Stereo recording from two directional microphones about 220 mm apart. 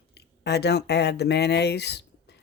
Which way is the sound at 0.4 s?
50° left (ahead or behind).